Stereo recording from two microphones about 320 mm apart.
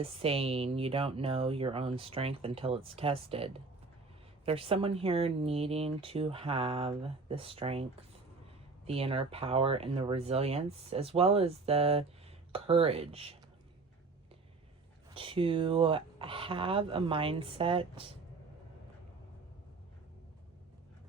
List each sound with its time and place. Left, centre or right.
0.0 s speech: centre
15.1 s speech: centre